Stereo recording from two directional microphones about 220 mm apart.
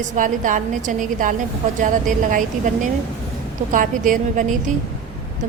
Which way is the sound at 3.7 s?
35° right (ahead or behind).